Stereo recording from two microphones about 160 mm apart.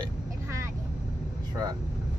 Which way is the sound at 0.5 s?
20° right (ahead or behind).